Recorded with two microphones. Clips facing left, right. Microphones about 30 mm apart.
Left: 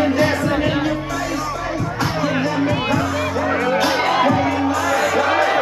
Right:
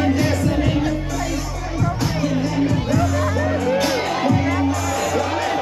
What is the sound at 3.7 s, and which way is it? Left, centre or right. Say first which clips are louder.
Music: left 3 dB; left.